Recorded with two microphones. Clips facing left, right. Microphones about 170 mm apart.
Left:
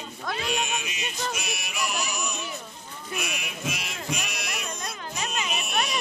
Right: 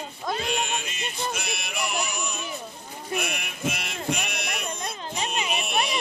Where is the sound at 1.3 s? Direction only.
60° right (ahead or behind).